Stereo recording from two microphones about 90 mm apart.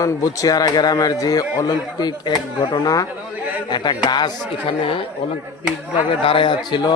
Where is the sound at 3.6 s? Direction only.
55° left (ahead or behind).